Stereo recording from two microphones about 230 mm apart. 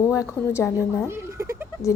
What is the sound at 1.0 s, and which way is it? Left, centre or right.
Speech, centre.